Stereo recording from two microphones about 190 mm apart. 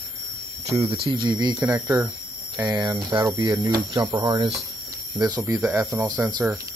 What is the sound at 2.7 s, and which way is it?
Speech, 20° right (ahead or behind).